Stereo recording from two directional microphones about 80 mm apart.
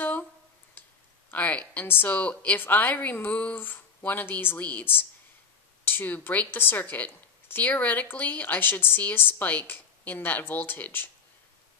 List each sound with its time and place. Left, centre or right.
1.3 s speech: centre